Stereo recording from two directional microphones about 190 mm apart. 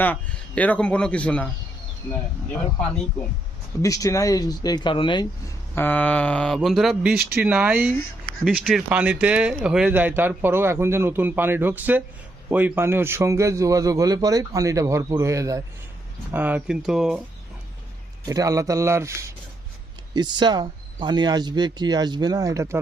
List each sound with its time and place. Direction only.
0.0 s speech: 10° left (ahead or behind)
3.8 s speech: 15° left (ahead or behind)
5.7 s a man's voice: 10° left (ahead or behind)
18.3 s a man's voice: 15° right (ahead or behind)